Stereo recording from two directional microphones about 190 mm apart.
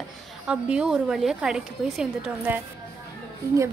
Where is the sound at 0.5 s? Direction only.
5° right (ahead or behind).